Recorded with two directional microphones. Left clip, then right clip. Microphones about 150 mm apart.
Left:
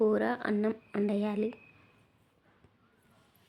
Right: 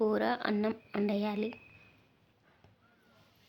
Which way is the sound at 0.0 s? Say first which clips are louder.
Left 2 dB; 15° left (ahead or behind).